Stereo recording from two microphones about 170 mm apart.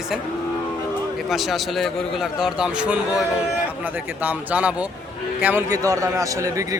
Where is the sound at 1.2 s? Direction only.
Centre (ahead or behind).